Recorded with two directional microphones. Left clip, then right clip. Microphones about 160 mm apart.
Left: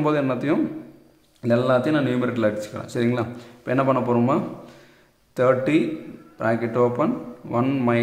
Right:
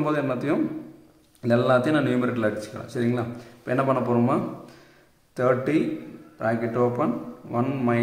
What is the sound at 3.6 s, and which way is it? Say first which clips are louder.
A man's voice: left 2 dB; 20° left (ahead or behind).